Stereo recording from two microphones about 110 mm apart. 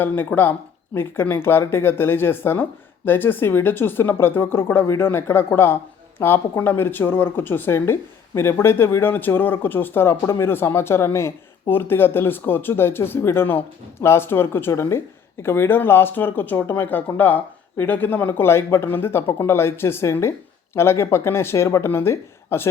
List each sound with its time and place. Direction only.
0.0 s speech: 20° left (ahead or behind)